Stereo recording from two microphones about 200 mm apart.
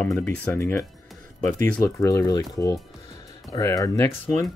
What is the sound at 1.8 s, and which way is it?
Speech, 15° left (ahead or behind).